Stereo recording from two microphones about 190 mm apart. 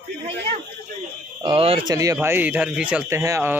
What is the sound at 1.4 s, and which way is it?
Speech, 30° right (ahead or behind).